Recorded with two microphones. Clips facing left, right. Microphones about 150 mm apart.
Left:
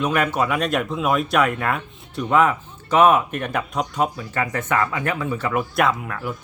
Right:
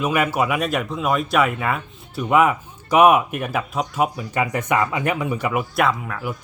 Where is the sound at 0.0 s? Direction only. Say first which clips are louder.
Right 1 dB; 5° right (ahead or behind).